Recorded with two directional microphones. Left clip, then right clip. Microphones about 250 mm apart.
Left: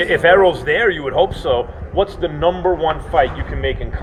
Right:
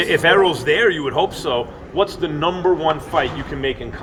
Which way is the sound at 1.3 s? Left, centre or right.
Right.